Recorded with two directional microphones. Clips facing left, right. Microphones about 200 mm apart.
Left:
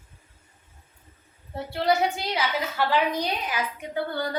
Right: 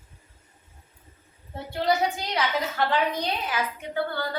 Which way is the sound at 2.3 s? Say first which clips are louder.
Right 1 dB; 10° left (ahead or behind).